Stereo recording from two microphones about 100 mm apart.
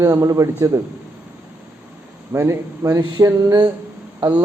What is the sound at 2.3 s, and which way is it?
Mantra, 30° right (ahead or behind).